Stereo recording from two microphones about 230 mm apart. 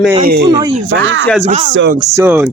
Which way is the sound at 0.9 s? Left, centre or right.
Right.